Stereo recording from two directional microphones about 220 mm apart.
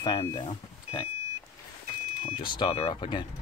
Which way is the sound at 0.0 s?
20° left (ahead or behind).